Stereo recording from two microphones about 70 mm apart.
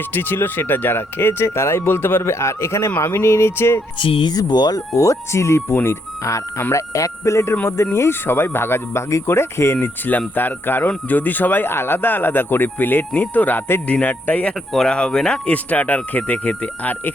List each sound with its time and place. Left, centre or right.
0.1 s speech: left
4.3 s speech: left
4.9 s speech: left
6.7 s speech: left
9.8 s speech: left
14.7 s speech: centre